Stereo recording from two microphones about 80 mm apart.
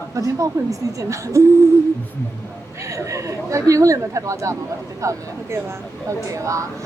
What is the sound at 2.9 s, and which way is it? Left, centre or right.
Speech, right.